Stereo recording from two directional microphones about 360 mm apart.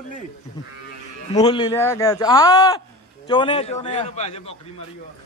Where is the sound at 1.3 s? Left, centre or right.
Centre.